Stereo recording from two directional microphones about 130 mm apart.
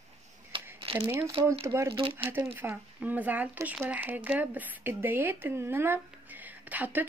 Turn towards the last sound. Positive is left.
turn(degrees=-10)  # may be behind; listen again after turning